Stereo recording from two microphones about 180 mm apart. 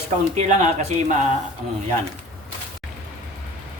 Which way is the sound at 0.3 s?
40° right (ahead or behind).